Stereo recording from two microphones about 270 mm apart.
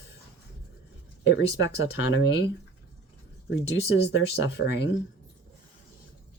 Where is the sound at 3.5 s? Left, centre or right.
Left.